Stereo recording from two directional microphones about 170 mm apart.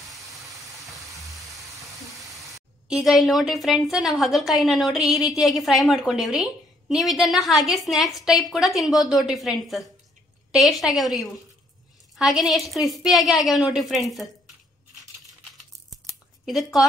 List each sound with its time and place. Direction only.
0.6 s vehicle: 20° right (ahead or behind)
1.0 s vehicle: centre (ahead or behind)
2.5 s a woman's voice: centre (ahead or behind)
16.4 s a woman's voice: centre (ahead or behind)